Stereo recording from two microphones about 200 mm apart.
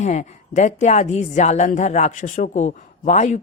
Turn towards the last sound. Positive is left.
turn(degrees=35)  # may be behind; listen again after turning